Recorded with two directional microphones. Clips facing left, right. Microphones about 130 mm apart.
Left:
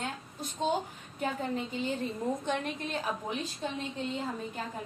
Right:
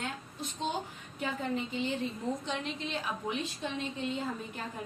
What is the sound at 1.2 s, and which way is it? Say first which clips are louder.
A woman's voice: left 1 dB; 40° left (ahead or behind).